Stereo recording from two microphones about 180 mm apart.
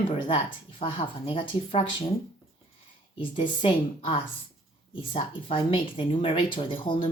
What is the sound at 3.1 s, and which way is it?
Speech, 30° left (ahead or behind).